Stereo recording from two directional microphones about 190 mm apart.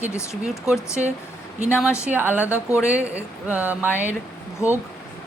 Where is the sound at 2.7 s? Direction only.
5° right (ahead or behind).